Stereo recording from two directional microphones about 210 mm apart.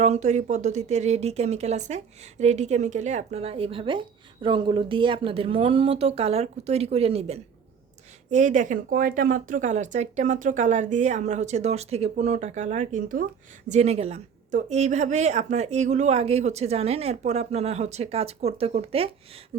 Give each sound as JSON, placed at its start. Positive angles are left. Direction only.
{"t": 0.0, "sound": "speech", "side_deg": -35}